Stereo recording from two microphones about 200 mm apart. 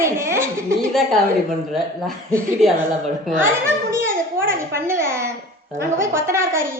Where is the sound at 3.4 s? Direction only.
10° right (ahead or behind).